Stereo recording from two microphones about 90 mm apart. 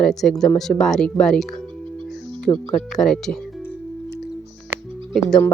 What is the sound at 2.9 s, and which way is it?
Speech, 5° left (ahead or behind).